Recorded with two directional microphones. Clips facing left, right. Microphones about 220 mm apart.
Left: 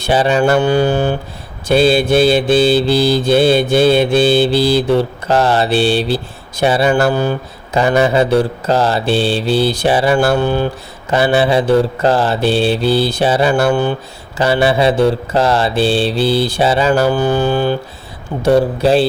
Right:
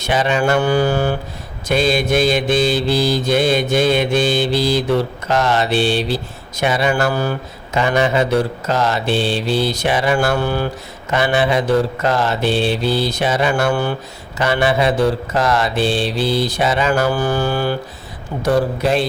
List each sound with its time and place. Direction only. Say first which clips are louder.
0.0 s mantra: left 4 dB; 35° left (ahead or behind)
0.6 s mantra: left 3 dB; 20° left (ahead or behind)
1.6 s mantra: left 5 dB; 35° left (ahead or behind)
7.1 s speech: left 4 dB; 20° left (ahead or behind)
7.8 s mantra: left 4 dB; 35° left (ahead or behind)
10.4 s mantra: left 4 dB; 20° left (ahead or behind)
17.1 s mantra: left 4 dB; 20° left (ahead or behind)